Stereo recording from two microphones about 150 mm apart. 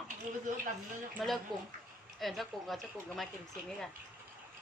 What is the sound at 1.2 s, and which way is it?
Speech, centre (ahead or behind).